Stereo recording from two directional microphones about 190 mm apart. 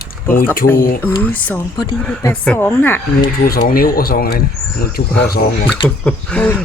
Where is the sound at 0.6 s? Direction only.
55° left (ahead or behind).